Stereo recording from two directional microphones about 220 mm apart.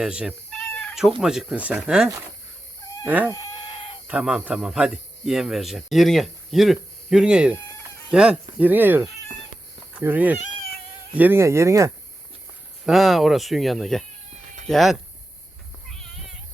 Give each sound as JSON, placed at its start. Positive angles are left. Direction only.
{"t": 0.0, "sound": "cat", "side_deg": -5}
{"t": 1.2, "sound": "speech", "side_deg": 0}
{"t": 3.1, "sound": "speech", "side_deg": -5}
{"t": 3.3, "sound": "chicken", "side_deg": 15}
{"t": 4.0, "sound": "speech", "side_deg": -5}
{"t": 12.8, "sound": "speech", "side_deg": 0}
{"t": 15.9, "sound": "cat", "side_deg": 0}